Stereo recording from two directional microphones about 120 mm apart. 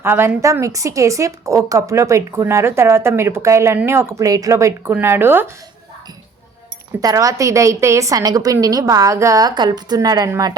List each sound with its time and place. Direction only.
0.0 s a woman's voice: 15° right (ahead or behind)
7.0 s a woman's voice: 30° right (ahead or behind)